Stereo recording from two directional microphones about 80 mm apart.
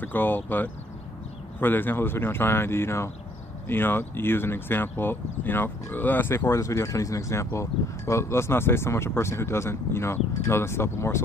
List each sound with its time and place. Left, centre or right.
0.0 s speech: left